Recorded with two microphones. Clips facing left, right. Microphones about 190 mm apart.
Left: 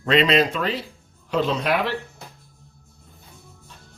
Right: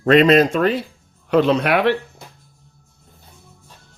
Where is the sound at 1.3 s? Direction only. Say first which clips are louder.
Right 6 dB; 65° right (ahead or behind).